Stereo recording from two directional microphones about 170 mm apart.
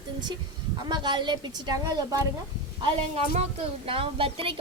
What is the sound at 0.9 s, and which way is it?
A woman's voice, 25° right (ahead or behind).